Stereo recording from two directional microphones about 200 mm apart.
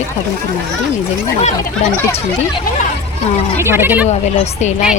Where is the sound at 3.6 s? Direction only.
10° right (ahead or behind).